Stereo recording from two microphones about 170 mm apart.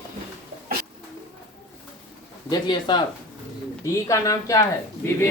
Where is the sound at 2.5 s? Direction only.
25° left (ahead or behind).